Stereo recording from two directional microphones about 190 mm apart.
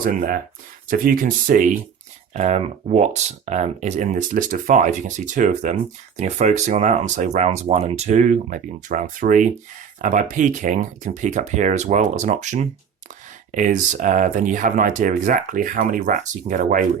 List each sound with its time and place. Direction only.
0.0 s speech: 45° right (ahead or behind)